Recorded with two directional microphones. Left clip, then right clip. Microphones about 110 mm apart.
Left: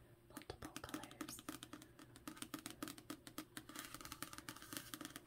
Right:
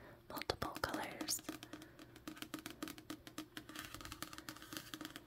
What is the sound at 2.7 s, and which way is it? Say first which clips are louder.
Music: right 3 dB; 5° right (ahead or behind).